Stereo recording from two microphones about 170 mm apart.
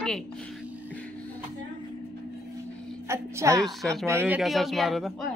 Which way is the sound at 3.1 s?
15° right (ahead or behind).